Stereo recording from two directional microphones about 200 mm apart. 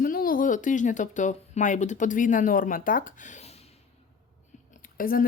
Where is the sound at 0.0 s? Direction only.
45° left (ahead or behind).